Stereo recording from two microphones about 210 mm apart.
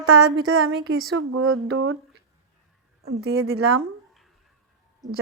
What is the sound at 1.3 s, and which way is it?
Speech, 85° right.